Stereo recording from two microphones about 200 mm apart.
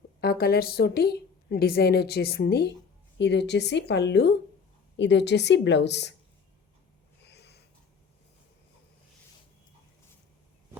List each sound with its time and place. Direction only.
0.2 s a woman's voice: 50° left (ahead or behind)
7.2 s wheeze: 55° left (ahead or behind)